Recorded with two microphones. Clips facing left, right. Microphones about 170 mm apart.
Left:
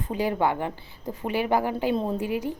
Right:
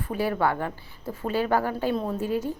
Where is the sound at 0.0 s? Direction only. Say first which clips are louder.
Even; 20° left (ahead or behind).